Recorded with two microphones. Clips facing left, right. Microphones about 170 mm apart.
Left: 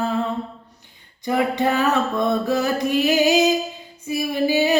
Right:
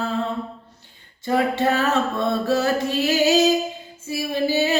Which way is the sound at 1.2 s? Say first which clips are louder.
Even; 15° left (ahead or behind).